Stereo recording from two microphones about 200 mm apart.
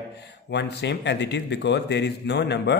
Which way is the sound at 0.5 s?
60° left (ahead or behind).